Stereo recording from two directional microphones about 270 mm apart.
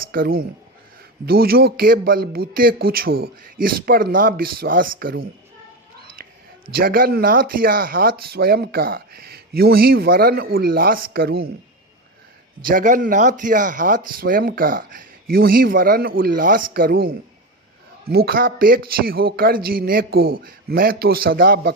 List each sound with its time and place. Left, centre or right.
0.0 s speech: right
6.2 s a sound: right
6.7 s speech: right
12.6 s speech: right